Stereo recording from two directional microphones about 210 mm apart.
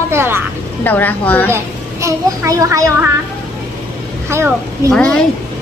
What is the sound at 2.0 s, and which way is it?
A woman's voice, 15° right (ahead or behind).